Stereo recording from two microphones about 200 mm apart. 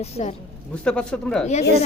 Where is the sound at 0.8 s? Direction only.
5° left (ahead or behind).